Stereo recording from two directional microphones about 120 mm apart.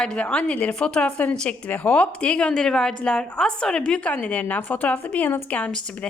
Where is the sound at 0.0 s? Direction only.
10° left (ahead or behind).